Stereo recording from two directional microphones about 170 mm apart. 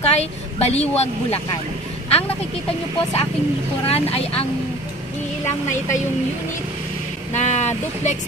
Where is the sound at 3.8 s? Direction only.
35° left (ahead or behind).